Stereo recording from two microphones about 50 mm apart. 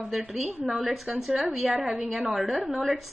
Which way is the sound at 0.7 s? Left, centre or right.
Centre.